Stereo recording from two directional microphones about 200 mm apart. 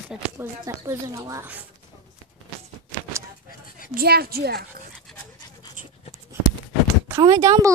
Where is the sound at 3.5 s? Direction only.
45° left (ahead or behind).